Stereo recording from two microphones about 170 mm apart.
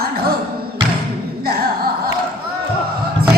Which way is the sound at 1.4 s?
60° right (ahead or behind).